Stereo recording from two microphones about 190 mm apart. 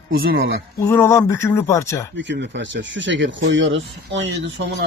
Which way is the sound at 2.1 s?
70° right (ahead or behind).